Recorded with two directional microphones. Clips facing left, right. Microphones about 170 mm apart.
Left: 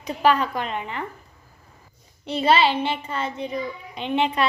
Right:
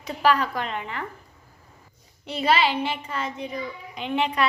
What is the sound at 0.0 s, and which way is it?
A child's voice, 20° left (ahead or behind).